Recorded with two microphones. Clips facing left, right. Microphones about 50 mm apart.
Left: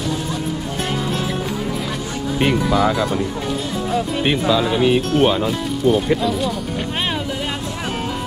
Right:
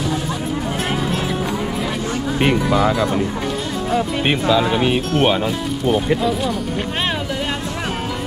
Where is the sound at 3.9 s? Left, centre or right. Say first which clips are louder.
Right 2 dB; centre.